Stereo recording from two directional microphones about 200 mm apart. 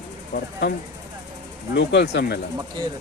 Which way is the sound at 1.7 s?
60° left (ahead or behind).